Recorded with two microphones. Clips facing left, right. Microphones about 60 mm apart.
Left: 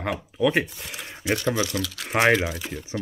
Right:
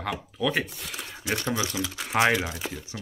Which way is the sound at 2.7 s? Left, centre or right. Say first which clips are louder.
Left 4 dB; left.